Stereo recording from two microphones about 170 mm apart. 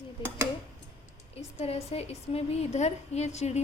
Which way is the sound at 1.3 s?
35° left (ahead or behind).